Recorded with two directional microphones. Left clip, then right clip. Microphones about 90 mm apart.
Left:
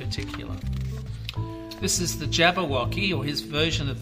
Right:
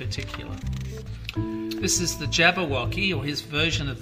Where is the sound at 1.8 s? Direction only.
30° left (ahead or behind).